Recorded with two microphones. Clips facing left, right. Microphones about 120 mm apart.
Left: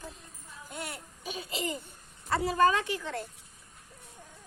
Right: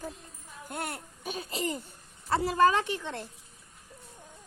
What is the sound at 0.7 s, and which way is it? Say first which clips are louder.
Speech: right 4 dB; 55° right (ahead or behind).